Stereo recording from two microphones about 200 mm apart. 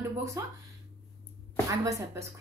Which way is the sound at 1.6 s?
15° right (ahead or behind).